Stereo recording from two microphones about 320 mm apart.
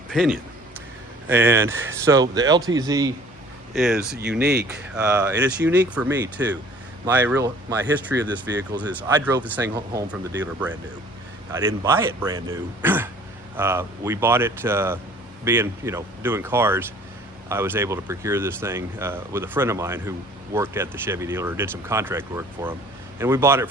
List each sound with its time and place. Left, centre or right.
0.1 s speech: centre
3.8 s speech: centre
4.2 s speech: right
4.9 s speech: centre